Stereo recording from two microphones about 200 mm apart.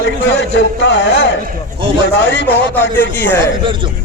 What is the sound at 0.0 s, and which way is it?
A man's voice, 60° left (ahead or behind).